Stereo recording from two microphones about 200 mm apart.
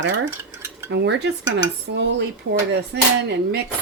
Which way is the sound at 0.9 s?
60° right (ahead or behind).